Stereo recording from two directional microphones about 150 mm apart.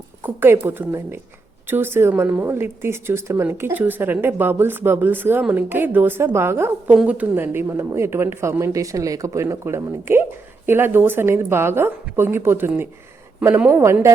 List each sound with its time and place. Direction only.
0.2 s a woman's voice: 15° right (ahead or behind)